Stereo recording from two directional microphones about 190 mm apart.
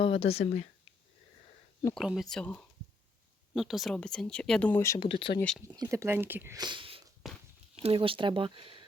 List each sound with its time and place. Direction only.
0.0 s speech: 30° left (ahead or behind)
2.0 s speech: centre (ahead or behind)
4.9 s speech: 25° left (ahead or behind)
5.4 s speech: 5° left (ahead or behind)
5.6 s speech: 20° right (ahead or behind)
7.2 s a sound: centre (ahead or behind)
7.8 s speech: 30° right (ahead or behind)